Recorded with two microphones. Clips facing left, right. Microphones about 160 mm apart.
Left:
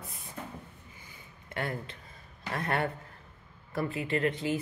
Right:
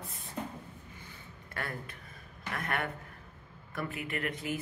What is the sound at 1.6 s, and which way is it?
Speech, 25° left (ahead or behind).